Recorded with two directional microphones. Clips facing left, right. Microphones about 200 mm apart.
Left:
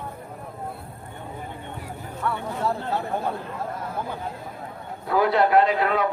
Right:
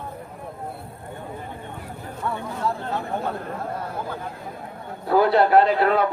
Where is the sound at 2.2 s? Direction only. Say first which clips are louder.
Left 1 dB; 20° right (ahead or behind).